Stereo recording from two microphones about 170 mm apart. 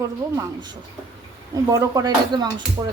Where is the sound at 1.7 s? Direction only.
20° right (ahead or behind).